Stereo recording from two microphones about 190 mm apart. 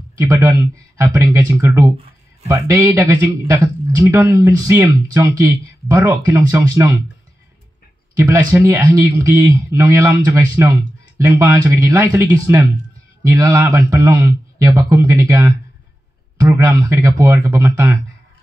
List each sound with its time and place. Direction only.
0.2 s speech: 15° right (ahead or behind)
8.2 s speech: 15° right (ahead or behind)